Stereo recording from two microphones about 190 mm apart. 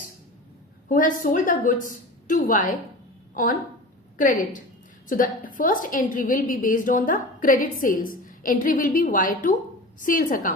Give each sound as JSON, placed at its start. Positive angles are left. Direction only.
{"t": 0.9, "sound": "a woman's voice", "side_deg": 45}